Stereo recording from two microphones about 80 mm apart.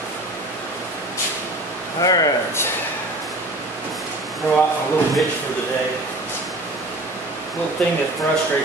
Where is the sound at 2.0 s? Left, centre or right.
Left.